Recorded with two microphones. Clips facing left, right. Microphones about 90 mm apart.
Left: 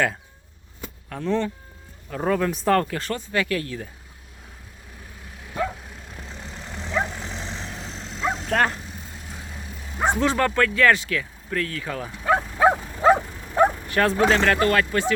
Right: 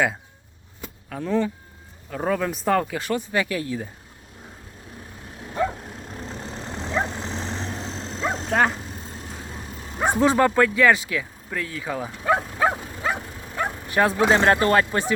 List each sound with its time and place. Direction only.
1.1 s speech: 5° right (ahead or behind)
5.6 s vehicle: 30° right (ahead or behind)
8.4 s speech: centre (ahead or behind)
8.8 s vehicle: 35° right (ahead or behind)
10.0 s speech: 15° right (ahead or behind)
12.2 s dog: 10° right (ahead or behind)
13.0 s dog: 35° left (ahead or behind)
13.8 s speech: 15° right (ahead or behind)